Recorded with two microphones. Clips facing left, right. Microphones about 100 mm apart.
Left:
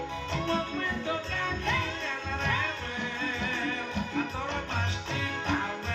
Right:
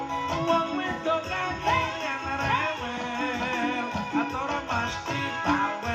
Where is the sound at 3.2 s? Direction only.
45° right (ahead or behind).